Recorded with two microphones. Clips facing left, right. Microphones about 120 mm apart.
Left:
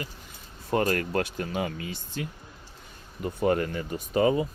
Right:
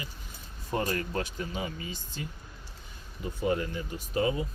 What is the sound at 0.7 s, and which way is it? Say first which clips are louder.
Speech: left 5 dB; 60° left (ahead or behind).